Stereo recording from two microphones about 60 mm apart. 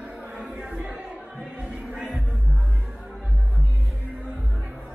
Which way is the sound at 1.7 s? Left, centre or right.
Centre.